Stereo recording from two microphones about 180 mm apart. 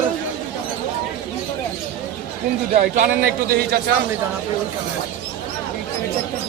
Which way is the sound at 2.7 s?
50° right (ahead or behind).